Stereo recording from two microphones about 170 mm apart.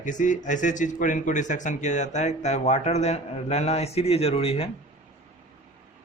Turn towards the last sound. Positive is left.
turn(degrees=35)  # may be behind; listen again after turning